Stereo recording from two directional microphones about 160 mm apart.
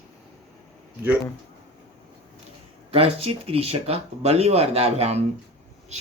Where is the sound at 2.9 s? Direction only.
35° right (ahead or behind).